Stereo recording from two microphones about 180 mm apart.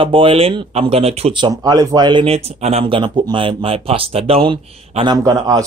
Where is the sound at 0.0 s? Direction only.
30° right (ahead or behind).